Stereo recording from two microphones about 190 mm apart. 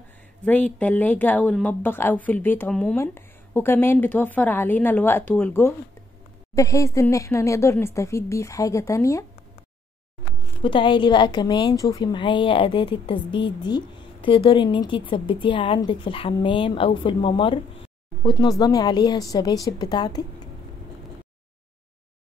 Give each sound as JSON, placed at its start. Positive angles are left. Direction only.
{"t": 0.7, "sound": "speech", "side_deg": 10}
{"t": 10.6, "sound": "a woman's voice", "side_deg": 25}